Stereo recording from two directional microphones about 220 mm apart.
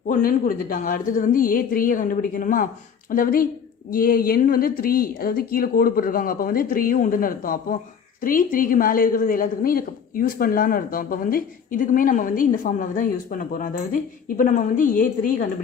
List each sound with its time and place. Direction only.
0.1 s a woman's voice: 40° left (ahead or behind)